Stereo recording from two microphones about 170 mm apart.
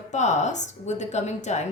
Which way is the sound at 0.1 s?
45° left (ahead or behind).